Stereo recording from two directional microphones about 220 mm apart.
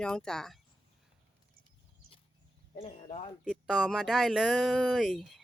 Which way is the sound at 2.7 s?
25° left (ahead or behind).